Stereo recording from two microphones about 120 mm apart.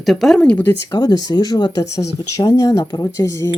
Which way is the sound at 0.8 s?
35° left (ahead or behind).